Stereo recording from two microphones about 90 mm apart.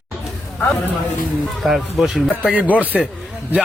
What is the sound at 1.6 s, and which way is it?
Speech, centre (ahead or behind).